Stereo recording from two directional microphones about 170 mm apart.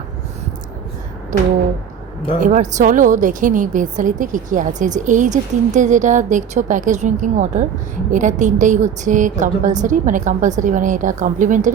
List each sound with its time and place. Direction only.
1.3 s speech: 45° right (ahead or behind)